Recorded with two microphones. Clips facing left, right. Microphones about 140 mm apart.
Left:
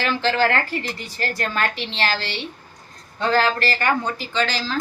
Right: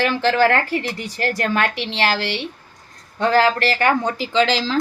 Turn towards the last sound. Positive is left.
turn(degrees=-90)